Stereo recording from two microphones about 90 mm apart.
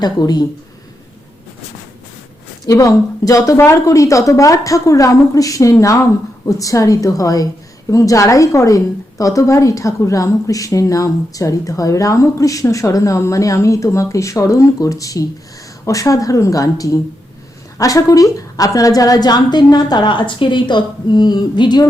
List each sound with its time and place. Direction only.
0.0 s a woman's voice: 50° left (ahead or behind)
2.6 s a woman's voice: 40° left (ahead or behind); by 21.8 s 55° left (ahead or behind)